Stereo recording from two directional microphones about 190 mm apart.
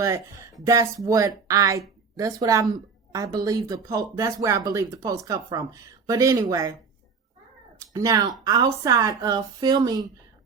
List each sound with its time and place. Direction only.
0.6 s a woman's voice: 15° right (ahead or behind)
7.8 s a woman's voice: 15° right (ahead or behind)